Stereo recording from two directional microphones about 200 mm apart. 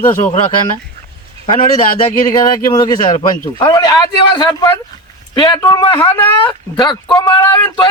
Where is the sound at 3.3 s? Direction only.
20° left (ahead or behind).